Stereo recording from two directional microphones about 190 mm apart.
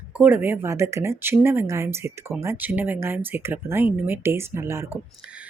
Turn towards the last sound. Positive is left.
turn(degrees=-10)  # may be behind; listen again after turning